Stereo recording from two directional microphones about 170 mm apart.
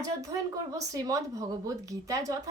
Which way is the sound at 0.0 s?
20° right (ahead or behind).